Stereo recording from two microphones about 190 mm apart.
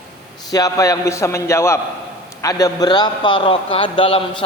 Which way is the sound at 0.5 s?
20° left (ahead or behind).